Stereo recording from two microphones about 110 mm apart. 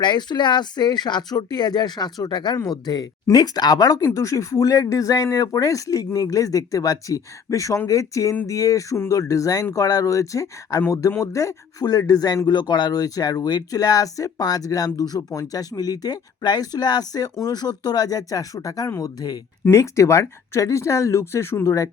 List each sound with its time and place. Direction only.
0.0 s speech: 40° left (ahead or behind); by 21.8 s 25° left (ahead or behind)